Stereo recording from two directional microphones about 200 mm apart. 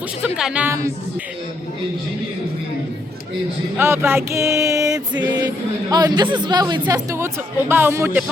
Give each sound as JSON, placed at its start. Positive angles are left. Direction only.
{"t": 0.2, "sound": "speech", "side_deg": -5}
{"t": 3.8, "sound": "music", "side_deg": -10}
{"t": 5.9, "sound": "speech", "side_deg": -20}
{"t": 7.7, "sound": "music", "side_deg": -10}